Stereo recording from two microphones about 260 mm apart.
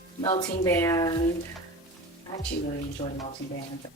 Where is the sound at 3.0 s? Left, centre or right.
Centre.